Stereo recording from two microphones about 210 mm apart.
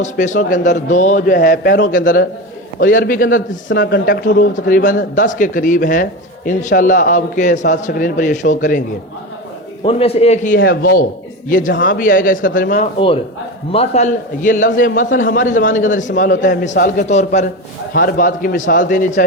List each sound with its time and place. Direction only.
0.0 s a man's voice: 35° left (ahead or behind)
9.8 s a man's voice: 25° left (ahead or behind)